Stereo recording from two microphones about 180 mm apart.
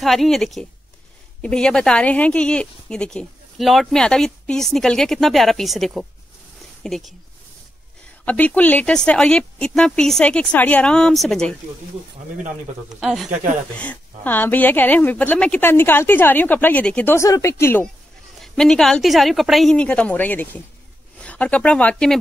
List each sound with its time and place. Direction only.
0.0 s speech: centre (ahead or behind)
8.3 s speech: 10° left (ahead or behind)
13.0 s speech: centre (ahead or behind)
13.3 s speech: 45° right (ahead or behind)
13.7 s a woman's voice: 10° left (ahead or behind)
18.4 s speech: centre (ahead or behind)